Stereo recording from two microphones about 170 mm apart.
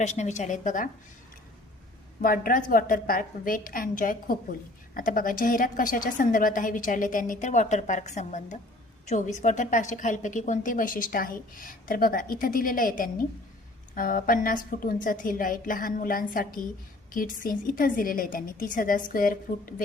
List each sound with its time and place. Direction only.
0.0 s a woman's voice: 40° left (ahead or behind)
2.2 s a woman's voice: 55° left (ahead or behind)